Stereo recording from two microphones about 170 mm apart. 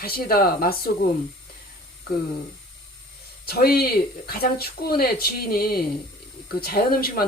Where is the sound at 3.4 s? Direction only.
65° left (ahead or behind).